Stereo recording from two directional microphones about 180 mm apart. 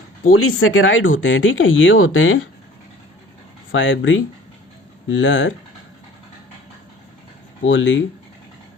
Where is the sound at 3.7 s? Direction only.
90° left.